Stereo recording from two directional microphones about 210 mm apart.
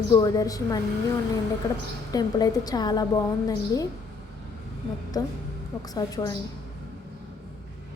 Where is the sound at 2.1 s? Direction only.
20° left (ahead or behind).